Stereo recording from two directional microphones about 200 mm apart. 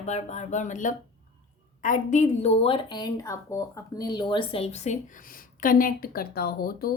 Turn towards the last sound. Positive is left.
turn(degrees=50)  # may be behind; listen again after turning